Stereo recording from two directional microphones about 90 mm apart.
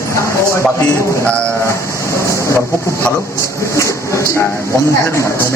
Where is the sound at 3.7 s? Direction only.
35° left (ahead or behind).